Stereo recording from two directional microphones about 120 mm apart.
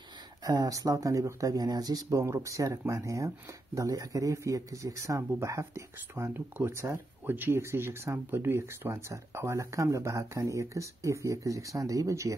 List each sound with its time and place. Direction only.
0.4 s speech: 30° right (ahead or behind)